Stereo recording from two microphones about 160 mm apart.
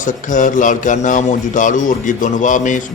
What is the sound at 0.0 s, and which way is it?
A man's voice, 55° left (ahead or behind).